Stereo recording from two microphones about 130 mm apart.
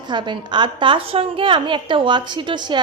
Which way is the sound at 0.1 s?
35° right (ahead or behind).